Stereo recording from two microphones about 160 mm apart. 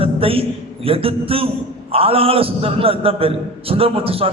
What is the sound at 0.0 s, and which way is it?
A man's voice, 35° right (ahead or behind).